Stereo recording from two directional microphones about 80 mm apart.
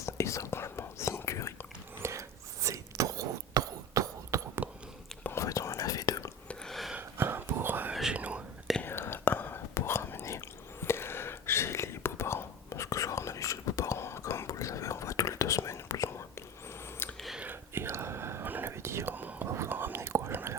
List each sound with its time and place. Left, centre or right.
0.0 s whispering: left
2.0 s whispering: right
4.6 s whispering: centre
5.2 s whispering: left
6.7 s a sound: centre
7.2 s whispering: right
8.8 s whispering: left
17.0 s a sound: left
17.4 s whispering: right